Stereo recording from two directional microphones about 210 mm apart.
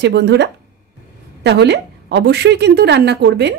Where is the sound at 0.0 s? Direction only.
55° right (ahead or behind).